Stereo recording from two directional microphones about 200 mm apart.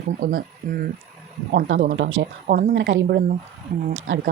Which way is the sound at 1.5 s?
70° right (ahead or behind).